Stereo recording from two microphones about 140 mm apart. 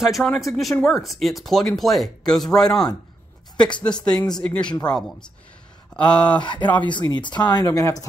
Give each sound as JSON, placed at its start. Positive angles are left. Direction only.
{"t": 0.0, "sound": "speech", "side_deg": 0}
{"t": 6.1, "sound": "speech", "side_deg": 35}